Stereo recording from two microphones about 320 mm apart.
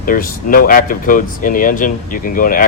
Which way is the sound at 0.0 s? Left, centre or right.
Left.